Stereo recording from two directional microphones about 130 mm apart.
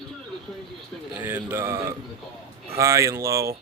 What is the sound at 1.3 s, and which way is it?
Speech, 15° right (ahead or behind).